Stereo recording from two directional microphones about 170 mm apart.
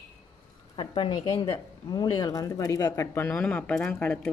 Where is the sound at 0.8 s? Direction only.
30° left (ahead or behind).